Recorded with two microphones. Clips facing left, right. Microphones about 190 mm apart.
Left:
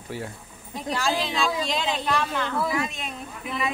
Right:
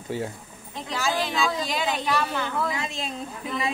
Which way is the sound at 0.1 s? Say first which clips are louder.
Right 4 dB; 25° right (ahead or behind).